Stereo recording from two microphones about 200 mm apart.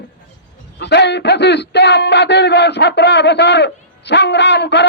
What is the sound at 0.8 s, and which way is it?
A man's voice, 60° left (ahead or behind).